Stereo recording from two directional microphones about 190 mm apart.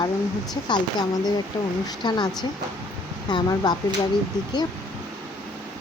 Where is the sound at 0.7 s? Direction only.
20° left (ahead or behind).